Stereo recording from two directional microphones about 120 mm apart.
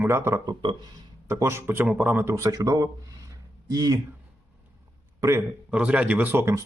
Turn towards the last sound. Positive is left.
turn(degrees=-20)  # may be behind; listen again after turning